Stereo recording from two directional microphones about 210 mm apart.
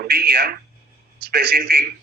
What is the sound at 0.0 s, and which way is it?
A man's voice, 50° right (ahead or behind).